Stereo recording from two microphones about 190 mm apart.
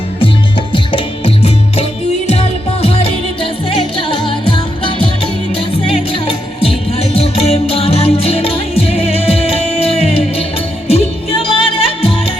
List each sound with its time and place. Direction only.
0.7 s music: 30° left (ahead or behind)